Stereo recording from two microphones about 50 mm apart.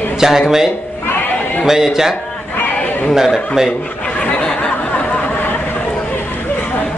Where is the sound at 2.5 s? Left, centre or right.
Left.